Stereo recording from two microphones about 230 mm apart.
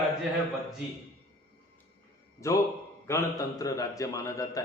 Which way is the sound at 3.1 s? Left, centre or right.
Centre.